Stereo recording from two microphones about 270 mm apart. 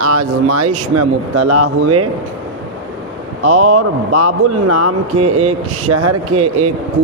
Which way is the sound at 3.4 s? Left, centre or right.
Right.